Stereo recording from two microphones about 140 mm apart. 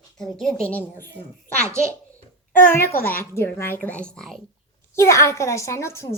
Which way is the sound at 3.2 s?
15° left (ahead or behind).